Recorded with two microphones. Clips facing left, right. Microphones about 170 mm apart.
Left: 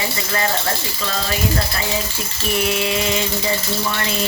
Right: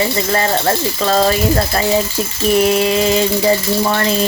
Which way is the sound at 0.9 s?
45° right (ahead or behind).